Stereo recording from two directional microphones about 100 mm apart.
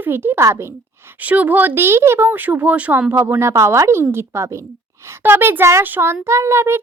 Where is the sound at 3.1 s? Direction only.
25° right (ahead or behind).